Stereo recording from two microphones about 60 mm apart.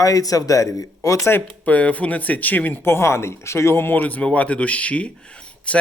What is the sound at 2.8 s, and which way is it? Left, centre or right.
Speech, left.